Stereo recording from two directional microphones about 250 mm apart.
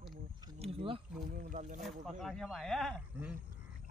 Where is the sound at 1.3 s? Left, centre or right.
Right.